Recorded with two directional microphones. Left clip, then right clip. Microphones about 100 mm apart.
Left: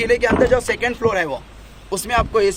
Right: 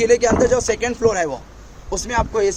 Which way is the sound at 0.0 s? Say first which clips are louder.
Right 2 dB; 50° right (ahead or behind).